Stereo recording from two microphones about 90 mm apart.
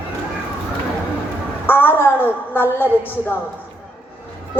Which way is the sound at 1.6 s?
25° left (ahead or behind).